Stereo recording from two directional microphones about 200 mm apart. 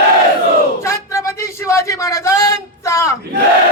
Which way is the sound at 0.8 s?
15° left (ahead or behind).